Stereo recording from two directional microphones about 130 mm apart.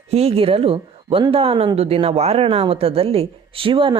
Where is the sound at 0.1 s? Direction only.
50° right (ahead or behind).